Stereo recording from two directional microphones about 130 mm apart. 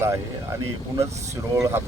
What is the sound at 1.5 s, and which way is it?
Speech, 20° right (ahead or behind).